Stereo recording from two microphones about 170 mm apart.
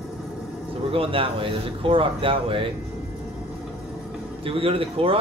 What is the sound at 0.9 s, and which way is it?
A man's voice, 30° right (ahead or behind).